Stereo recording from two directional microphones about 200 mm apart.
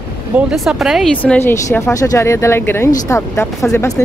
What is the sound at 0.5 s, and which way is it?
Speech, centre (ahead or behind).